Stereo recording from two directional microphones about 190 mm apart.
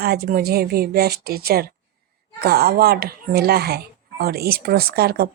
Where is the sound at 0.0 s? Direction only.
55° right (ahead or behind).